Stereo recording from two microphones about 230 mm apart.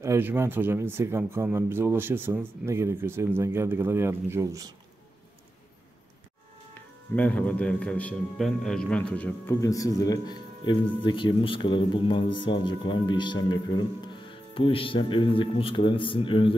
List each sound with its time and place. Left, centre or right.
0.0 s speech: centre
6.7 s speech: centre; by 16.5 s left